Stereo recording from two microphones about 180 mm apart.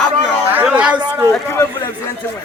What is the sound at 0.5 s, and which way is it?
Chatter, 5° right (ahead or behind).